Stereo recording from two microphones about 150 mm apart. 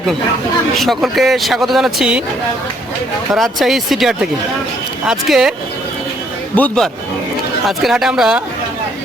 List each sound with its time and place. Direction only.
0.8 s a man's voice: centre (ahead or behind)
3.3 s a man's voice: centre (ahead or behind)
6.6 s a man's voice: 5° left (ahead or behind)